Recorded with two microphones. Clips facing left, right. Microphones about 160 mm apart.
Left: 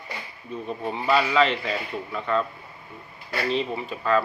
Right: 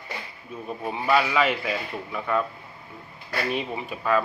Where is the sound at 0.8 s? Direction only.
5° right (ahead or behind).